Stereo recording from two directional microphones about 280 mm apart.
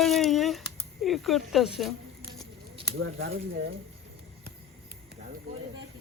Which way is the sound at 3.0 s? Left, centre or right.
Right.